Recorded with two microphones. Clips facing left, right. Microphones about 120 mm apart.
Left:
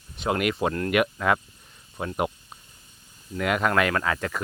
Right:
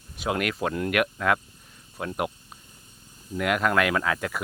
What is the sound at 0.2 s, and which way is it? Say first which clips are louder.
Speech: left 2 dB; centre (ahead or behind).